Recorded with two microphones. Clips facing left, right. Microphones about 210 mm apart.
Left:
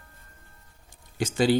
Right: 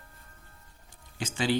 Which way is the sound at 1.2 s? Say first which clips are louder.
Left 7 dB; 40° left (ahead or behind).